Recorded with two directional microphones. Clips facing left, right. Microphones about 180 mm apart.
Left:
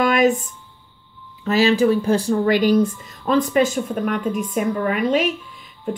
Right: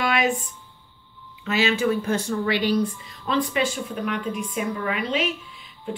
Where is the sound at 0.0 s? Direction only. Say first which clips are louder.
Left 6 dB; 45° left (ahead or behind).